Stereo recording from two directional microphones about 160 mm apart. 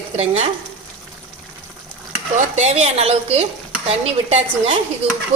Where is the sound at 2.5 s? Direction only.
40° right (ahead or behind).